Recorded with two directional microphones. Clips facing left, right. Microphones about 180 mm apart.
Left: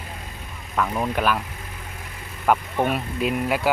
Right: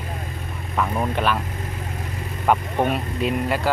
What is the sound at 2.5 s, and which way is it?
Speech, 5° left (ahead or behind).